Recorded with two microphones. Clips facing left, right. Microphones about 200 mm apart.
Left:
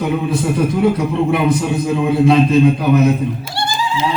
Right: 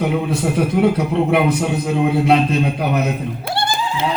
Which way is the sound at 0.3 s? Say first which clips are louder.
Left 2 dB; 60° right (ahead or behind).